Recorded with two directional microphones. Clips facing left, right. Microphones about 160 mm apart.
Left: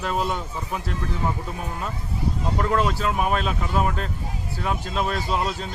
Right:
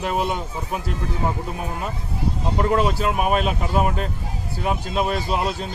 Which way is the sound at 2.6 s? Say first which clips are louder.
Right 3 dB; 20° right (ahead or behind).